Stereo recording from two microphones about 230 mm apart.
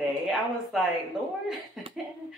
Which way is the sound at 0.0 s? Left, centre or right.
Centre.